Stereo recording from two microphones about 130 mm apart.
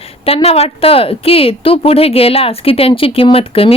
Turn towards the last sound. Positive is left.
turn(degrees=45)  # may be behind; listen again after turning